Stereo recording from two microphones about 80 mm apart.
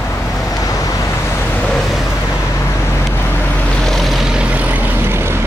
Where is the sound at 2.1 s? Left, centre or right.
Left; by 3.7 s centre.